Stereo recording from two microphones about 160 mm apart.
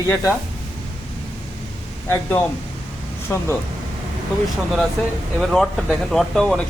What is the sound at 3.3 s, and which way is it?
Speech, 15° left (ahead or behind).